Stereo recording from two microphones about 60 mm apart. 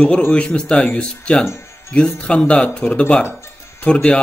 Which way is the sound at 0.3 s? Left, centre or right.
Centre.